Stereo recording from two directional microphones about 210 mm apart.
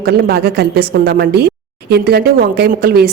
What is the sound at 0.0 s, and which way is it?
A woman's voice, 50° right (ahead or behind).